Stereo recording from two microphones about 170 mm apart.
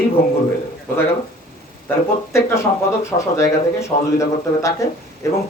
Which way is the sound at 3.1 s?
15° left (ahead or behind).